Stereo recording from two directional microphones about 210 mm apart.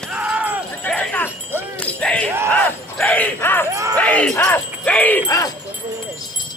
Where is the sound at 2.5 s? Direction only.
5° left (ahead or behind).